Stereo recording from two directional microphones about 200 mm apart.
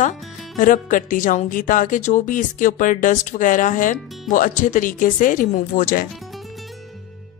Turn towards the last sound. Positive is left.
turn(degrees=0)  # may be behind; listen again after turning